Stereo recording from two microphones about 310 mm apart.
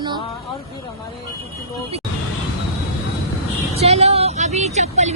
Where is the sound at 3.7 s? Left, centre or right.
Centre.